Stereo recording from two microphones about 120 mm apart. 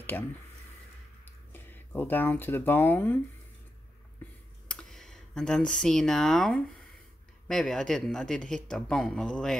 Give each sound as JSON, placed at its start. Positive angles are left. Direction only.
{"t": 0.1, "sound": "speech", "side_deg": 15}
{"t": 4.2, "sound": "clicking", "side_deg": 15}
{"t": 4.6, "sound": "a man's voice", "side_deg": 5}